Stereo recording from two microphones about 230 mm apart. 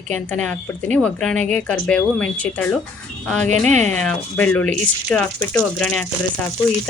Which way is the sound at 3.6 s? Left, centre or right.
Right.